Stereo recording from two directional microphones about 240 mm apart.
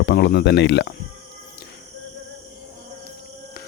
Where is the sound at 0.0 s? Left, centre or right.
Left.